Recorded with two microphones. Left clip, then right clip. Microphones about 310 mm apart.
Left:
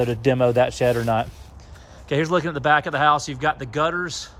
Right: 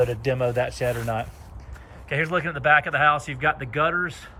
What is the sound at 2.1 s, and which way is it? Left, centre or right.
Speech, centre.